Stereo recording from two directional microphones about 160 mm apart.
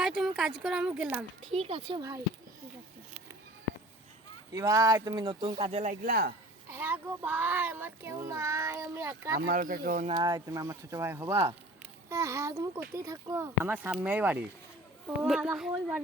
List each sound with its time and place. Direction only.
0.0 s speech: 5° right (ahead or behind)
1.5 s speech: 40° right (ahead or behind)
2.0 s speech: 20° right (ahead or behind)
4.5 s speech: 20° right (ahead or behind)
5.7 s speech: 55° right (ahead or behind); by 6.3 s 80° right
6.7 s a child's voice: 15° right (ahead or behind)
9.5 s speech: 60° right (ahead or behind)
10.1 s a child's voice: 25° right (ahead or behind); by 16.0 s 5° right (ahead or behind)